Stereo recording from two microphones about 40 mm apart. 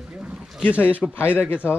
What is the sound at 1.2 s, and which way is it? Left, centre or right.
Speech, left.